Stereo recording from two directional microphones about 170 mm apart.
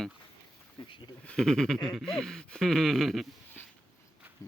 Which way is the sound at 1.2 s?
5° left (ahead or behind).